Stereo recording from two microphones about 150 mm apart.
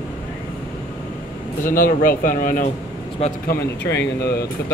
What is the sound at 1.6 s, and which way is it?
Speech, 70° left (ahead or behind).